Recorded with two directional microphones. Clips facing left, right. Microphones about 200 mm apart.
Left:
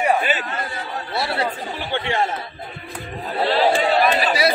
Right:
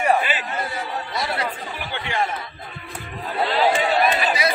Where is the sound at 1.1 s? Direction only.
30° left (ahead or behind).